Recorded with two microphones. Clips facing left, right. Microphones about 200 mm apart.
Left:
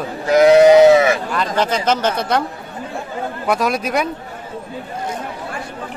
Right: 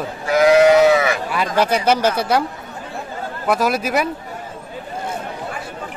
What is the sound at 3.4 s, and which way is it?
Speech, 5° right (ahead or behind).